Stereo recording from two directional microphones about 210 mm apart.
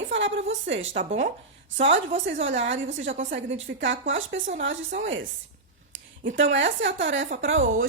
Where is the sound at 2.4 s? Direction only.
60° right (ahead or behind).